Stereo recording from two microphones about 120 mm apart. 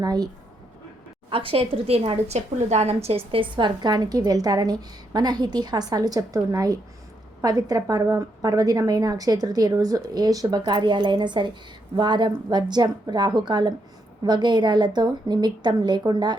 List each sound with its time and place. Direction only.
0.0 s a woman's voice: 35° right (ahead or behind)
1.3 s a woman's voice: 50° right (ahead or behind)
3.3 s a woman's voice: 45° right (ahead or behind)